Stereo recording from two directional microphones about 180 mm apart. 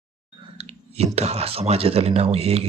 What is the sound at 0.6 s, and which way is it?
Speech, 35° right (ahead or behind).